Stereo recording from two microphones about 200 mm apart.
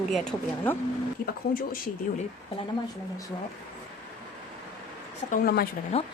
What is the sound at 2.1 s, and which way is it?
Speech, 45° left (ahead or behind).